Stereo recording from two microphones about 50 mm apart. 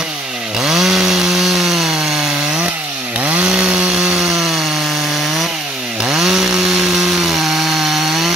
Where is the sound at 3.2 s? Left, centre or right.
Right.